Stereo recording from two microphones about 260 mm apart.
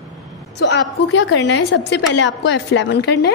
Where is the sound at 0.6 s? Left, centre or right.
Left.